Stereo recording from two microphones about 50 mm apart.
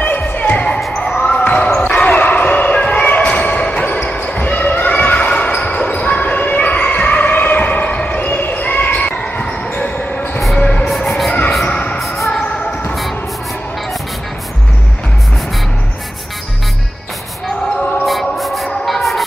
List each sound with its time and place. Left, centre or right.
0.0 s basketball bounce: left
0.9 s basketball bounce: centre
1.9 s basketball bounce: centre
2.1 s basketball bounce: left
10.5 s train: left
10.8 s music: centre
18.0 s a sound: centre